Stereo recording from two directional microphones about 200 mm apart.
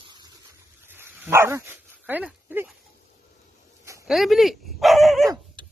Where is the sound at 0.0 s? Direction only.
20° right (ahead or behind).